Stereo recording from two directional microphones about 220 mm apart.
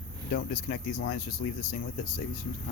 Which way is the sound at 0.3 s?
40° left (ahead or behind).